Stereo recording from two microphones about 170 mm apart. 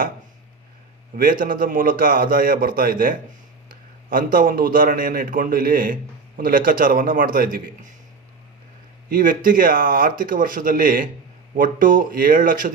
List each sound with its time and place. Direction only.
1.1 s a man's voice: 55° right (ahead or behind)
9.0 s a man's voice: 55° right (ahead or behind)